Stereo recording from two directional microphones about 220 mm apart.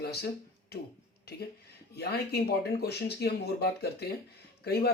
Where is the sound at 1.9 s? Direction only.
45° left (ahead or behind).